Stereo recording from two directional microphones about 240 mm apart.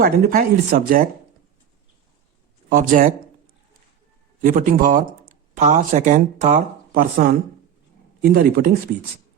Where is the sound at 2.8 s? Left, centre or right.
Right.